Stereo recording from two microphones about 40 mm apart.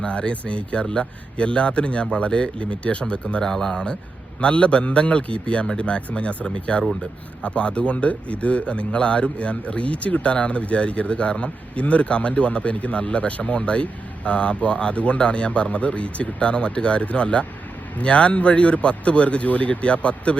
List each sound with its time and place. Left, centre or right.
0.0 s speech: left
3.4 s speech: centre; by 20.3 s left